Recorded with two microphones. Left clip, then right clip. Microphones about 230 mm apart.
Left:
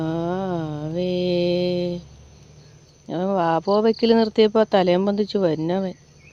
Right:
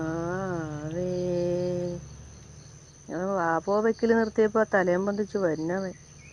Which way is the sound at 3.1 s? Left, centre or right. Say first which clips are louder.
Left 6 dB; left.